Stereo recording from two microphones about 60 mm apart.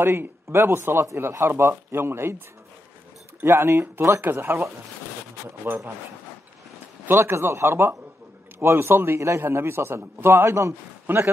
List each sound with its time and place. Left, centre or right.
0.0 s a man's voice: right
3.4 s speech: right
4.2 s a man's voice: right
7.1 s a man's voice: right